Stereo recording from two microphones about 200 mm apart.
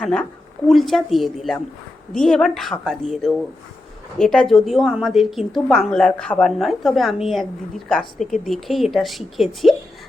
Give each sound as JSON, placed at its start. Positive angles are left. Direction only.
{"t": 0.0, "sound": "speech", "side_deg": 5}